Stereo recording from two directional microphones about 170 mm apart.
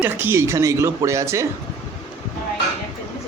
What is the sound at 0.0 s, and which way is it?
Speech, 15° right (ahead or behind).